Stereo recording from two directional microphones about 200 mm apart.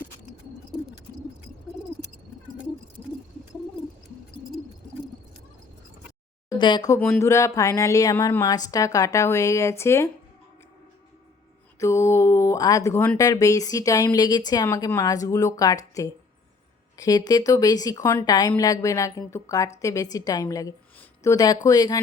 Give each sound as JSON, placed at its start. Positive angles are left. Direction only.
{"t": 6.6, "sound": "speech", "side_deg": 25}
{"t": 11.8, "sound": "speech", "side_deg": 15}